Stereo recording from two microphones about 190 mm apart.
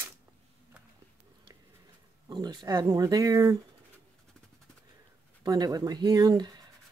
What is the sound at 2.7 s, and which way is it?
Speech, 15° right (ahead or behind).